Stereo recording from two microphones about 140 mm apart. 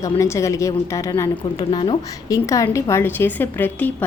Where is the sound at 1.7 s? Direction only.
35° left (ahead or behind).